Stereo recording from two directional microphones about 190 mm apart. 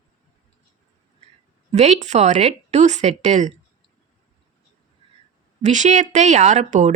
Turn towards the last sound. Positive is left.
turn(degrees=-40)  # may be behind; listen again after turning